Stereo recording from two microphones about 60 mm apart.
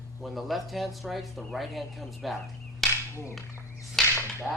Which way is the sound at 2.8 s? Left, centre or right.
Centre.